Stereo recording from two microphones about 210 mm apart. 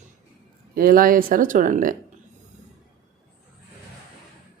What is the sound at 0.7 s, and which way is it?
Speech, 45° right (ahead or behind).